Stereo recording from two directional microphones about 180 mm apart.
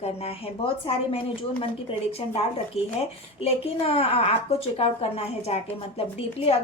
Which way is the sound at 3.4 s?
35° left (ahead or behind).